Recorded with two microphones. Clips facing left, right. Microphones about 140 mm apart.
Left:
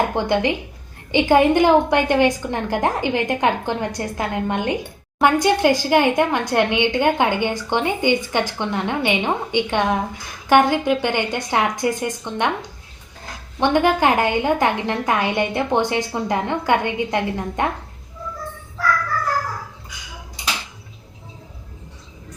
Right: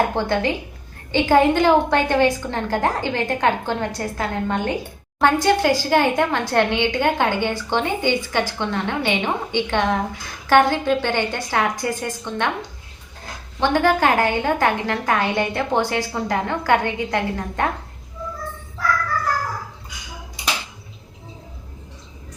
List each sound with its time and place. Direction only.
0.1 s a woman's voice: 15° left (ahead or behind)
13.6 s a woman's voice: 20° left (ahead or behind)